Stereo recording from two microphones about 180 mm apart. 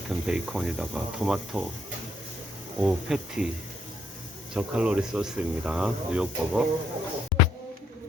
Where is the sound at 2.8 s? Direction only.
5° right (ahead or behind).